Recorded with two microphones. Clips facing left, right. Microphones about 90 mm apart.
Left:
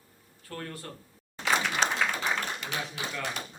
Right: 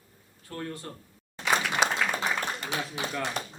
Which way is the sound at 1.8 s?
10° right (ahead or behind).